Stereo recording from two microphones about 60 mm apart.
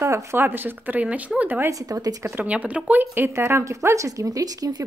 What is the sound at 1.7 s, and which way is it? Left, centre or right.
Speech, right.